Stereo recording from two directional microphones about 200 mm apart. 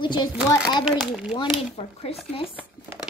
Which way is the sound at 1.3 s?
30° left (ahead or behind).